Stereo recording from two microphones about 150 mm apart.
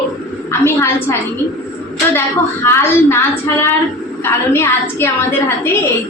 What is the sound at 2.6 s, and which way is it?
Speech, 15° left (ahead or behind).